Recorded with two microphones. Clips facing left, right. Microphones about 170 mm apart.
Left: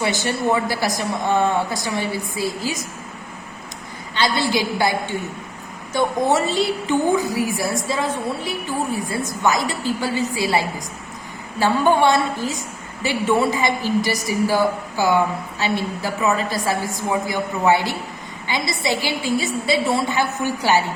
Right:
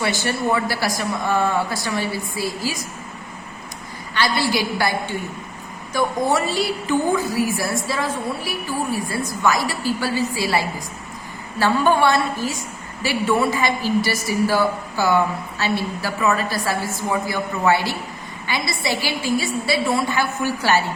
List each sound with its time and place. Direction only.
0.0 s a woman's voice: 20° left (ahead or behind)
4.1 s a woman's voice: 20° left (ahead or behind)